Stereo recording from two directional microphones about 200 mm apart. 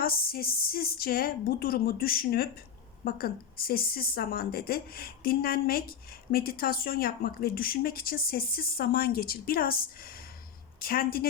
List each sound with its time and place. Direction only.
0.0 s speech: 50° left (ahead or behind)